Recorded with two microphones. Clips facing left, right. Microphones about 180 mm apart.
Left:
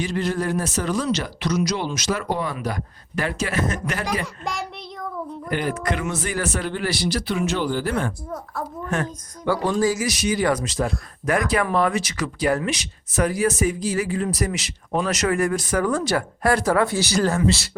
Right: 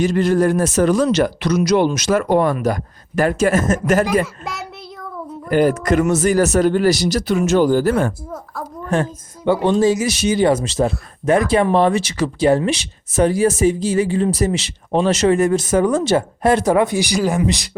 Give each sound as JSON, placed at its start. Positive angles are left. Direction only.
{"t": 0.0, "sound": "speech", "side_deg": -45}
{"t": 5.5, "sound": "speech", "side_deg": -45}
{"t": 8.9, "sound": "speech", "side_deg": -25}